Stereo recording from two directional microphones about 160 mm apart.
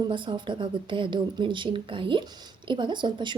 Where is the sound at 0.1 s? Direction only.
30° right (ahead or behind).